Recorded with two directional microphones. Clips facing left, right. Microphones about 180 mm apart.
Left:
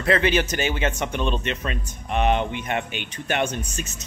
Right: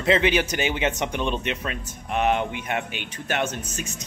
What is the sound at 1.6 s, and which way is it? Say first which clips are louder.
Speech: left 1 dB; 5° right (ahead or behind).